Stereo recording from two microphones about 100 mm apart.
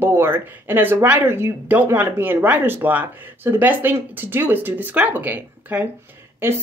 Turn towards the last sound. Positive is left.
turn(degrees=-20)  # may be behind; listen again after turning